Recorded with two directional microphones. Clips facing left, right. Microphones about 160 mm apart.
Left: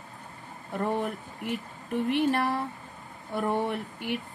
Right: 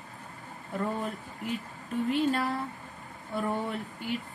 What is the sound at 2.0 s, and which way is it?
Speech, 65° left (ahead or behind).